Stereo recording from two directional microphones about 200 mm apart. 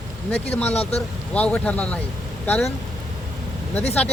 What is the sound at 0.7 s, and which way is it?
Speech, 30° left (ahead or behind).